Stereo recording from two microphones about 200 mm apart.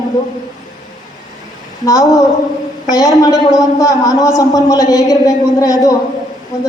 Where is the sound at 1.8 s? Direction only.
15° left (ahead or behind).